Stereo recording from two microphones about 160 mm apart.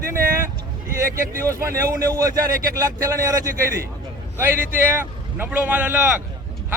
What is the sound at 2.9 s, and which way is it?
A man's voice, 20° right (ahead or behind).